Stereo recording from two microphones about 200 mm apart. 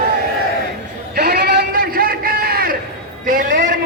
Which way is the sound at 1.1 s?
50° right (ahead or behind).